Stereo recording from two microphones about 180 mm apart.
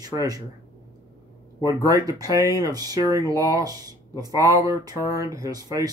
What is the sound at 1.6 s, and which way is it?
Speech, 20° right (ahead or behind).